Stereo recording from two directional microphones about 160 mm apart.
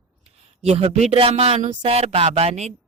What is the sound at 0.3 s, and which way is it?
Speech, 40° right (ahead or behind).